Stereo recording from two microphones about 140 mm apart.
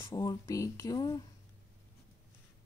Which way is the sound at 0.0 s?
20° left (ahead or behind).